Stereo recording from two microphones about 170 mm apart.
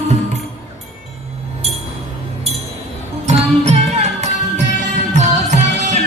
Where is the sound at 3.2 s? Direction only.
40° right (ahead or behind).